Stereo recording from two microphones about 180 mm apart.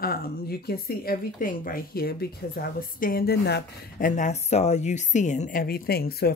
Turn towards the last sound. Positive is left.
turn(degrees=60)  # may be behind; listen again after turning